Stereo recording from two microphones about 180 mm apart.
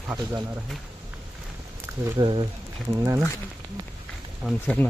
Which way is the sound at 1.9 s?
10° right (ahead or behind).